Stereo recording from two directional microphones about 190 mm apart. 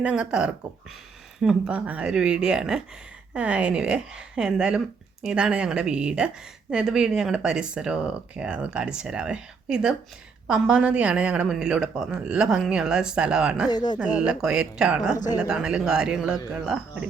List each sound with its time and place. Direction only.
0.0 s a woman's voice: 5° right (ahead or behind)
13.7 s speech: 20° left (ahead or behind)
14.0 s a woman's voice: 5° right (ahead or behind)